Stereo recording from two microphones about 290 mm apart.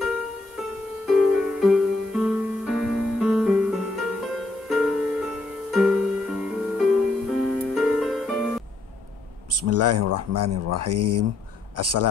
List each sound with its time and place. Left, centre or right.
0.6 s music: centre
9.5 s speech: right